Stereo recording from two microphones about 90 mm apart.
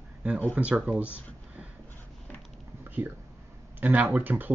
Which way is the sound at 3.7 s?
20° right (ahead or behind).